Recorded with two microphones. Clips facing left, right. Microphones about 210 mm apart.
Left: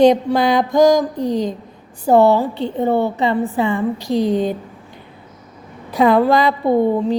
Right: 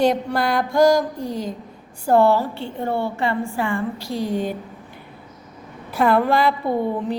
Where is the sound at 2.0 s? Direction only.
15° left (ahead or behind).